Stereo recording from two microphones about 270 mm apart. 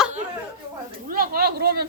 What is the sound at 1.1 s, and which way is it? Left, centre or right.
Speech, right.